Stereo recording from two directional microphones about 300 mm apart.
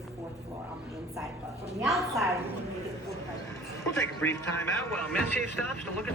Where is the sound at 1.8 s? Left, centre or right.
Centre.